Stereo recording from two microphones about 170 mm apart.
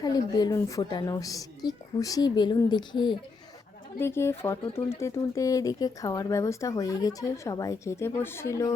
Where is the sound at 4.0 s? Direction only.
15° left (ahead or behind).